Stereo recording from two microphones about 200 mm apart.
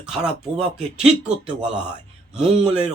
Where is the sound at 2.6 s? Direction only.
35° right (ahead or behind).